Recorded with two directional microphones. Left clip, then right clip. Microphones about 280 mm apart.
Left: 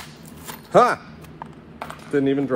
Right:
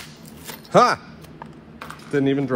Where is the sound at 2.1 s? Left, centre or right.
Right.